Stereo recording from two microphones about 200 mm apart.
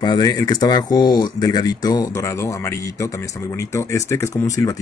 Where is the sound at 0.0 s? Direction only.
20° left (ahead or behind).